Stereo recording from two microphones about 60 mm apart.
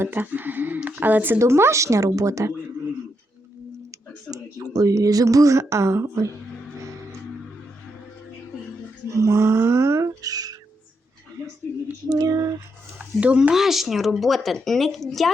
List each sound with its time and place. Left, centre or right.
0.0 s speech: right
1.4 s speech: right
4.3 s speech: right
9.0 s speech: right
10.2 s speech: right
12.0 s speech: right
13.1 s speech: right
13.5 s a woman's voice: centre